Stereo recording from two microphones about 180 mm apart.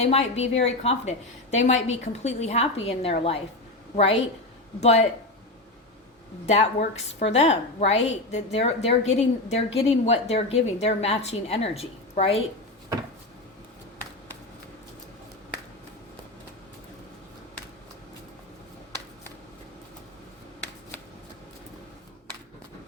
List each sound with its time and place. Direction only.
0.0 s a woman's voice: 35° left (ahead or behind)
6.4 s a woman's voice: 40° left (ahead or behind)